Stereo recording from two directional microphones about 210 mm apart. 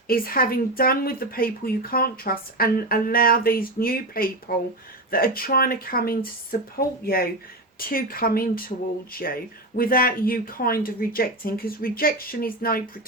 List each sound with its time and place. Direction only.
0.1 s speech: 45° left (ahead or behind)